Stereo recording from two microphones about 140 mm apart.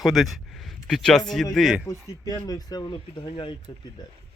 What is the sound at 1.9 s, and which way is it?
Speech, 25° left (ahead or behind).